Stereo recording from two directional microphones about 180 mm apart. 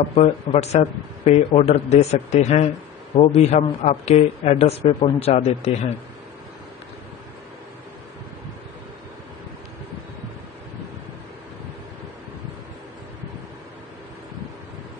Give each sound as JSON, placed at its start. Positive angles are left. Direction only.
{"t": 0.1, "sound": "speech", "side_deg": 35}